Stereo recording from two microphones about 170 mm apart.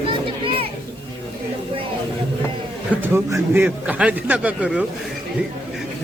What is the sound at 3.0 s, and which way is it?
A man's voice, 15° right (ahead or behind).